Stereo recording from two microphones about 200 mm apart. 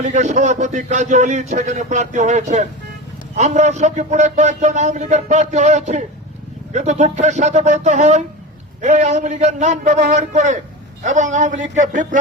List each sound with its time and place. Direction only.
0.0 s a man's voice: 35° right (ahead or behind)